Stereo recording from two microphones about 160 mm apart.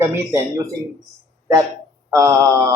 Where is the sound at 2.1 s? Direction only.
15° right (ahead or behind).